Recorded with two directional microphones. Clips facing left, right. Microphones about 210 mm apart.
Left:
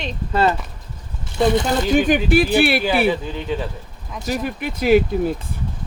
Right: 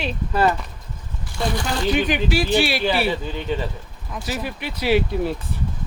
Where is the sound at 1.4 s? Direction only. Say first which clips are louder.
Left 7 dB; 20° left (ahead or behind).